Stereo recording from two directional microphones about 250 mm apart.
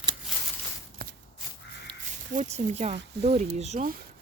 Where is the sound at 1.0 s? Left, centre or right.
Right.